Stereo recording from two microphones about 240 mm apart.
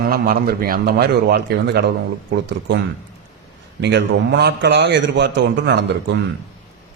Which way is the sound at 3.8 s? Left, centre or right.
Right.